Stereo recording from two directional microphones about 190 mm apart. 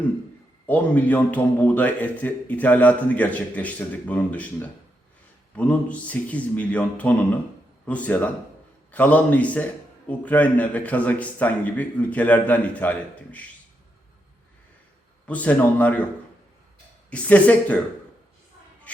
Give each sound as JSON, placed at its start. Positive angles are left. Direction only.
{"t": 0.7, "sound": "a man's voice", "side_deg": 10}
{"t": 15.3, "sound": "a man's voice", "side_deg": 5}
{"t": 17.1, "sound": "a man's voice", "side_deg": 10}